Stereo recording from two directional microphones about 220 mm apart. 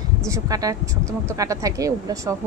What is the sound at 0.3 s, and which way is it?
Speech, 15° right (ahead or behind).